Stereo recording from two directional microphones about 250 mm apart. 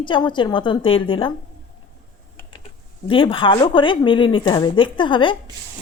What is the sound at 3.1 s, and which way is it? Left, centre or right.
Speech, left.